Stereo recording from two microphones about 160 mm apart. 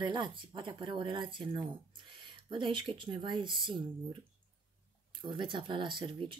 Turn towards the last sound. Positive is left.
turn(degrees=-30)  # may be behind; listen again after turning